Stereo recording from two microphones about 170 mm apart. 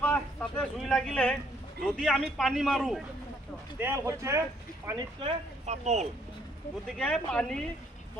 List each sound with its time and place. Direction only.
0.0 s a sound: 5° left (ahead or behind)
1.8 s a man's voice: 5° left (ahead or behind)
3.8 s speech: 15° right (ahead or behind)
5.2 s speech: 40° right (ahead or behind)
6.8 s a man's voice: 5° left (ahead or behind)